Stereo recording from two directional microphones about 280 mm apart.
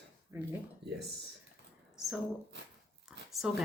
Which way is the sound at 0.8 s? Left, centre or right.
Right.